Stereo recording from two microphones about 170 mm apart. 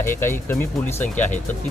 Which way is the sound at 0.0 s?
15° left (ahead or behind).